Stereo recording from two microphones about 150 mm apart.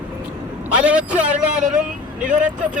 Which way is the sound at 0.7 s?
5° right (ahead or behind).